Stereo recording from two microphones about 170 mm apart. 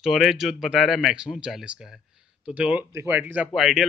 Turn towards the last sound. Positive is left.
turn(degrees=-5)  # may be behind; listen again after turning